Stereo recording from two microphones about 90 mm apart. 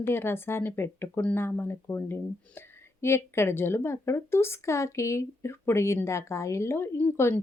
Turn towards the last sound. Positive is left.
turn(degrees=25)  # may be behind; listen again after turning